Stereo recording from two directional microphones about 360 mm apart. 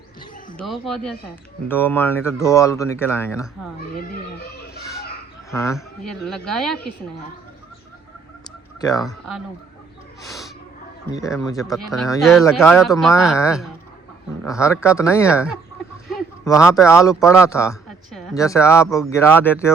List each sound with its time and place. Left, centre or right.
0.5 s speech: centre
4.7 s children playing: left
5.5 s speech: centre
8.8 s speech: centre
10.2 s a sound: centre
11.1 s speech: centre
16.1 s a sound: centre
16.6 s speech: centre